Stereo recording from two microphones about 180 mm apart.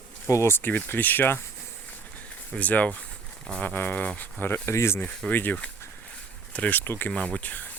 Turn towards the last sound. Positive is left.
turn(degrees=10)  # may be behind; listen again after turning